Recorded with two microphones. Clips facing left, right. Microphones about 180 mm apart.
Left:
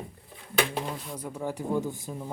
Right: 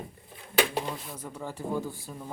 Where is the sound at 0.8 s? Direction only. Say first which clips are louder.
Even; centre (ahead or behind).